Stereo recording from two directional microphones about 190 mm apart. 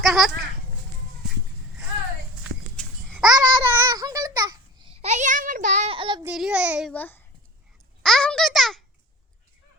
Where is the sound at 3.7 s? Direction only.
15° right (ahead or behind).